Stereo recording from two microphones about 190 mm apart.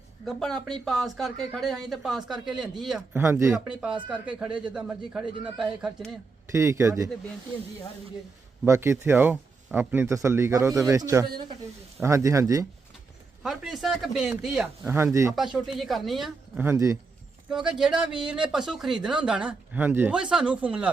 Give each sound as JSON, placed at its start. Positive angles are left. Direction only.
{"t": 0.3, "sound": "speech", "side_deg": 0}
{"t": 3.2, "sound": "speech", "side_deg": -15}
{"t": 6.5, "sound": "speech", "side_deg": -15}
{"t": 8.6, "sound": "speech", "side_deg": -15}
{"t": 13.4, "sound": "speech", "side_deg": 0}
{"t": 15.5, "sound": "speech", "side_deg": 0}
{"t": 16.6, "sound": "speech", "side_deg": -15}
{"t": 17.5, "sound": "speech", "side_deg": -5}